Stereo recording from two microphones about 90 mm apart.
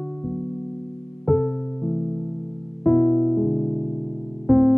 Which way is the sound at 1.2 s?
10° left (ahead or behind).